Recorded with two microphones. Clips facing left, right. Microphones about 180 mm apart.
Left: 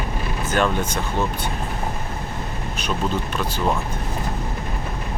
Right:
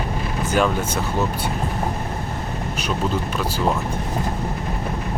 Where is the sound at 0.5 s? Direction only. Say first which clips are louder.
Right 1 dB; 5° right (ahead or behind).